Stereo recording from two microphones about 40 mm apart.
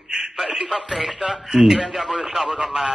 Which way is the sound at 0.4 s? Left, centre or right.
Centre.